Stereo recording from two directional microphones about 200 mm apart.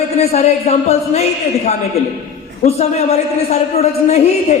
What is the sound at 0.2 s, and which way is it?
Speech, 30° left (ahead or behind).